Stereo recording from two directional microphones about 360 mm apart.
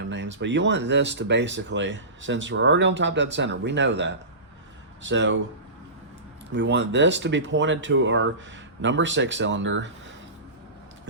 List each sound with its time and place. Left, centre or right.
0.1 s speech: right
6.5 s speech: right